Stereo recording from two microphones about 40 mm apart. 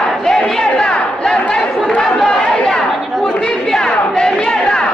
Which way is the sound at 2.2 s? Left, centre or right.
Centre.